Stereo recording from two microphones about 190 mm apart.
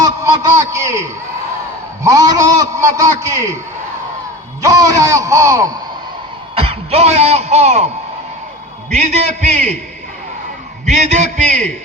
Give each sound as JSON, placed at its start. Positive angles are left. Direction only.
{"t": 0.0, "sound": "a sound", "side_deg": -15}
{"t": 2.0, "sound": "a man's voice", "side_deg": -20}
{"t": 4.6, "sound": "a man's voice", "side_deg": -15}
{"t": 6.6, "sound": "speech", "side_deg": -30}
{"t": 8.9, "sound": "a man's voice", "side_deg": -35}
{"t": 10.8, "sound": "a man's voice", "side_deg": -40}